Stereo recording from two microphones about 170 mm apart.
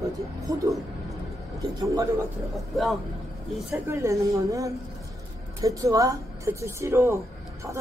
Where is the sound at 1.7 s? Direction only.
20° right (ahead or behind).